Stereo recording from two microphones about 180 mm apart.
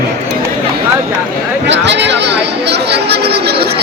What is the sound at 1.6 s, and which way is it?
Speech, 75° right (ahead or behind).